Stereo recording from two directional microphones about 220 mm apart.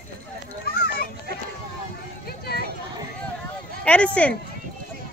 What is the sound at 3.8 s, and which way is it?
Speech, 5° left (ahead or behind).